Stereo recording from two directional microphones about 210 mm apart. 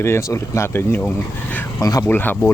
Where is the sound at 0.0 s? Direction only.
15° left (ahead or behind).